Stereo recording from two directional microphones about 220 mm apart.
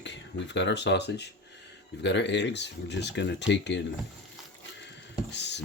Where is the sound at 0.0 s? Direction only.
55° left (ahead or behind).